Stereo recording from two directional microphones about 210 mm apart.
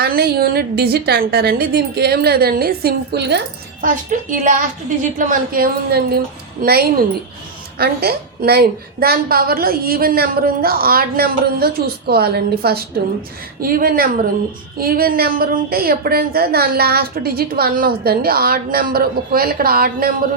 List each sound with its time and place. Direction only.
0.0 s a woman's voice: 45° right (ahead or behind)